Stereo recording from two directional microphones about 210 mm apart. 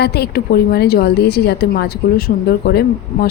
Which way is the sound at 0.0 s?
50° left (ahead or behind).